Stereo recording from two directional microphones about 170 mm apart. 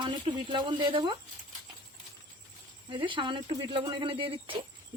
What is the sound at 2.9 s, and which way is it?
Speech, 30° right (ahead or behind).